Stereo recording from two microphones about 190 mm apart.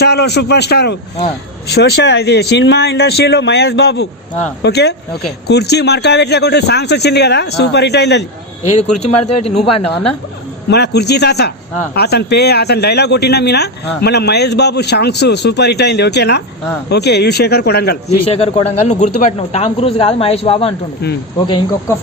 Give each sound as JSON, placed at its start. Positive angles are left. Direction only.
{"t": 0.0, "sound": "speech", "side_deg": 60}
{"t": 8.6, "sound": "a man's voice", "side_deg": 35}
{"t": 10.7, "sound": "speech", "side_deg": 60}
{"t": 18.3, "sound": "a man's voice", "side_deg": 35}